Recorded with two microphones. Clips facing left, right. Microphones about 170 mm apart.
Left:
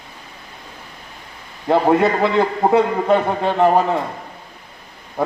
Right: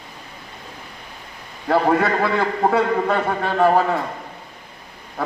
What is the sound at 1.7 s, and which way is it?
A man's voice, 20° left (ahead or behind).